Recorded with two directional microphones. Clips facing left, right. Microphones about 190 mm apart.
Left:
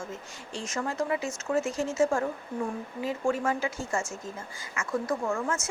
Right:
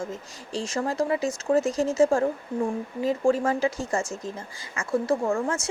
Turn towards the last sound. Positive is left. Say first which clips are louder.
# right 4 dB
turn(degrees=-30)  # may be behind; listen again after turning